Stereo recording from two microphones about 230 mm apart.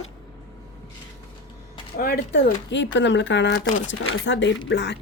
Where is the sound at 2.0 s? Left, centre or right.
Left.